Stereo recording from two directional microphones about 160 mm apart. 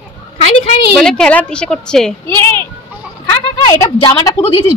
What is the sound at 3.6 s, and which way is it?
Speech, 25° left (ahead or behind).